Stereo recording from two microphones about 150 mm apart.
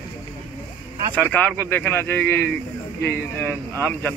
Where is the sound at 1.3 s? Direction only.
10° left (ahead or behind).